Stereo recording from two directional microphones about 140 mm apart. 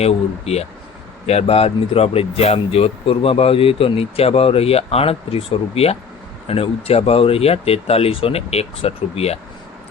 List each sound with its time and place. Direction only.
0.0 s speech: 50° left (ahead or behind)